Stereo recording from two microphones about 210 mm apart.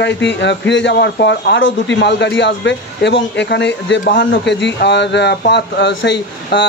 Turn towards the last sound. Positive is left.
turn(degrees=55)  # may be behind; listen again after turning